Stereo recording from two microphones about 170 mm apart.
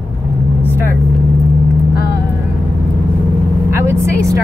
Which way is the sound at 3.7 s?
15° right (ahead or behind).